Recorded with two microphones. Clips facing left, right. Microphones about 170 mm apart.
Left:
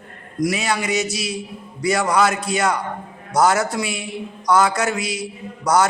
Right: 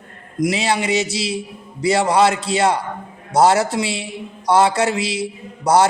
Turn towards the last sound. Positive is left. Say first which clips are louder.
# right 3 dB
turn(degrees=-30)  # may be behind; listen again after turning